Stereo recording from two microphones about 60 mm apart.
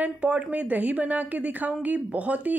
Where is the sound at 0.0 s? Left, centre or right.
Right.